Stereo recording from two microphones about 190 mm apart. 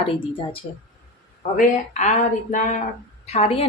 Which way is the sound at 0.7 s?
35° left (ahead or behind).